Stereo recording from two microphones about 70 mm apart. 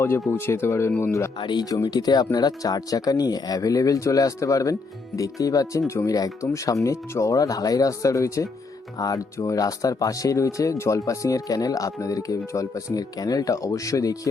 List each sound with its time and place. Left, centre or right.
0.0 s speech: left
1.4 s speech: left